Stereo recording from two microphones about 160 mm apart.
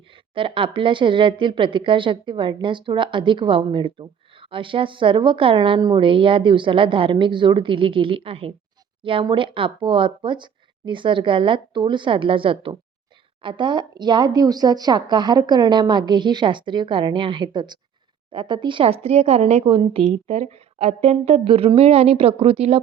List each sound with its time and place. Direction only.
0.3 s a woman's voice: 35° right (ahead or behind)